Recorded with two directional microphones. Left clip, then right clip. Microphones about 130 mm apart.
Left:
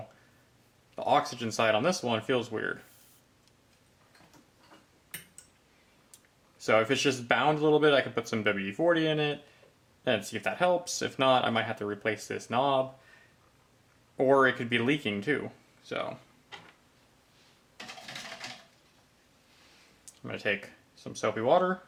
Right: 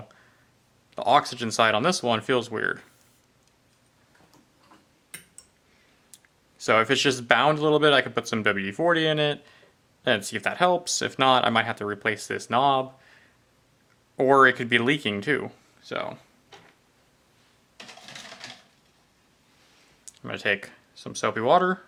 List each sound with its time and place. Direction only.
0.9 s speech: 40° right (ahead or behind)
6.6 s speech: 35° right (ahead or behind)
14.2 s speech: 40° right (ahead or behind)
20.1 s speech: 40° right (ahead or behind)